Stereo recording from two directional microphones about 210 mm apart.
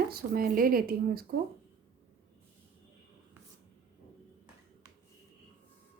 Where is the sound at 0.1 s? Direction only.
45° right (ahead or behind).